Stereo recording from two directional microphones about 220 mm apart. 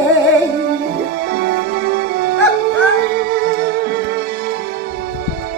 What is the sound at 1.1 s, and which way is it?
Music, 45° right (ahead or behind).